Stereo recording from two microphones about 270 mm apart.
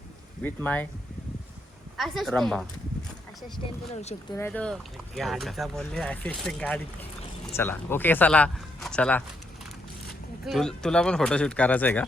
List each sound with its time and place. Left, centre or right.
0.4 s speech: centre
2.0 s speech: centre
3.9 s speech: left
4.4 s speech: centre
10.4 s speech: centre